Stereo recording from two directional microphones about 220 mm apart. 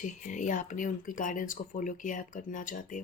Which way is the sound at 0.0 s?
35° left (ahead or behind).